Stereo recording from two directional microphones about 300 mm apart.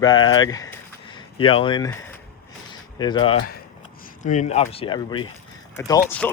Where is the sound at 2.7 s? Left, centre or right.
Centre.